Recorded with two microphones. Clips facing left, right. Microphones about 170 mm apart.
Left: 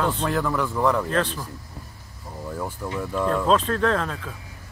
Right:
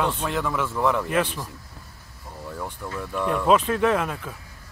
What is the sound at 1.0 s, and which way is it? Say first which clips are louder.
Speech: even; 10° right (ahead or behind).